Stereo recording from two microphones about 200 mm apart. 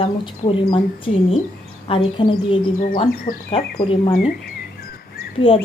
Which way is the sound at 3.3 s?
25° left (ahead or behind).